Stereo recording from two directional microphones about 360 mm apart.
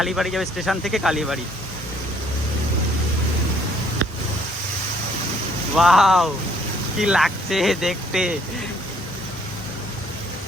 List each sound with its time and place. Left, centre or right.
0.0 s speech: centre
5.7 s speech: centre